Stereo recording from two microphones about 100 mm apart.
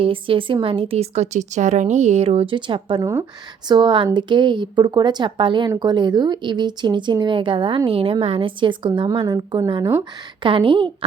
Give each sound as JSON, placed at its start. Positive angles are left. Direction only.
{"t": 0.0, "sound": "speech", "side_deg": -60}
{"t": 2.6, "sound": "speech", "side_deg": -55}
{"t": 3.0, "sound": "speech", "side_deg": -30}
{"t": 3.7, "sound": "a woman's voice", "side_deg": -50}